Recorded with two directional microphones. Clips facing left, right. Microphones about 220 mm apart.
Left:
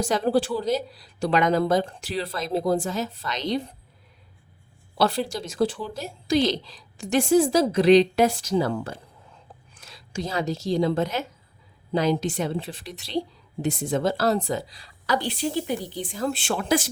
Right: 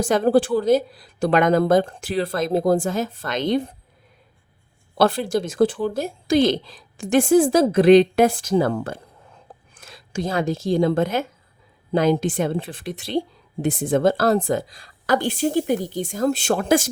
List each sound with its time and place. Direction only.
0.0 s a woman's voice: 50° right (ahead or behind)
4.9 s a woman's voice: 50° right (ahead or behind)